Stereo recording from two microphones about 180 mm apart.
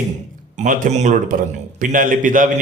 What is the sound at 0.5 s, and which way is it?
Speech, 45° right (ahead or behind).